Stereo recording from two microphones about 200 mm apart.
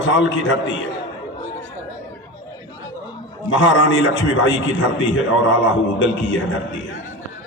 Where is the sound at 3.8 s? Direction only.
65° left (ahead or behind).